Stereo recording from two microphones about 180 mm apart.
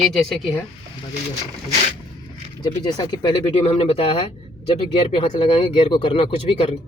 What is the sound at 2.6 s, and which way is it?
Speech, 25° left (ahead or behind).